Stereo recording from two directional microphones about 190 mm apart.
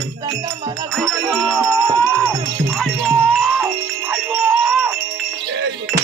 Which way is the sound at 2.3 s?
15° right (ahead or behind).